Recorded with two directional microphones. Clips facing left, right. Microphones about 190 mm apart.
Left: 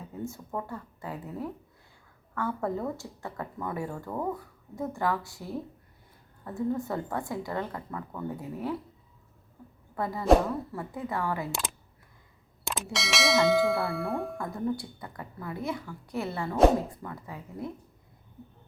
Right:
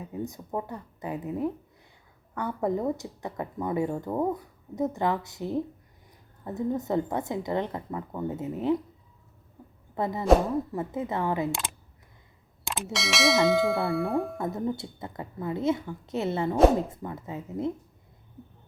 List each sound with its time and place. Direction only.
0.1 s speech: 15° right (ahead or behind)
9.9 s speech: 20° right (ahead or behind)
12.6 s ding: centre (ahead or behind)
14.3 s speech: 20° right (ahead or behind)